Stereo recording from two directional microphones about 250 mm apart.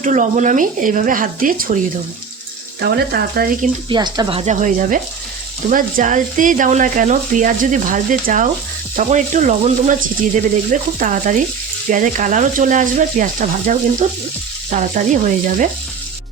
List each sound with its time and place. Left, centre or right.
0.0 s speech: right
2.8 s speech: right
3.8 s speech: centre